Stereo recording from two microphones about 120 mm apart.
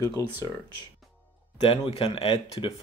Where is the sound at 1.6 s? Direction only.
50° left (ahead or behind).